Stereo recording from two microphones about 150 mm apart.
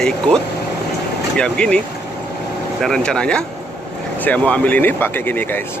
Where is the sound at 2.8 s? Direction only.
5° left (ahead or behind).